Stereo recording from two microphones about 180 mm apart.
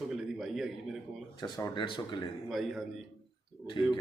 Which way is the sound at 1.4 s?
25° left (ahead or behind).